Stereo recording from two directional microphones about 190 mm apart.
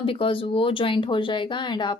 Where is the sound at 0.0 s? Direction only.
30° left (ahead or behind).